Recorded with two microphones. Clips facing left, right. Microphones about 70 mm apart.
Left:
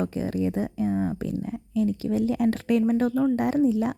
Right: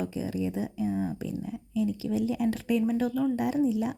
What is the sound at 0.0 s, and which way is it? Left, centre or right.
Speech, left.